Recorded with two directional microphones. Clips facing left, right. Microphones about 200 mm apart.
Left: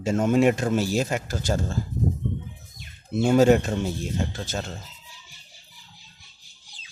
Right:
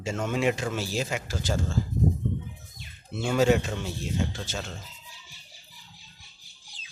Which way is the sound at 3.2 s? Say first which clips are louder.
Left 5 dB; 45° left (ahead or behind).